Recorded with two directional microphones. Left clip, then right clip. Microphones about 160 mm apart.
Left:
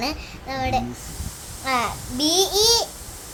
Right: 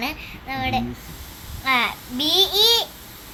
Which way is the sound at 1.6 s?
25° left (ahead or behind).